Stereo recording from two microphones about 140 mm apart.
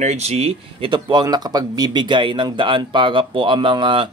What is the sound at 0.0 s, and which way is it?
Speech, 50° right (ahead or behind).